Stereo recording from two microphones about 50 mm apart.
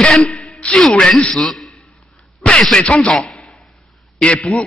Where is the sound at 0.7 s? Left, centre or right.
Centre.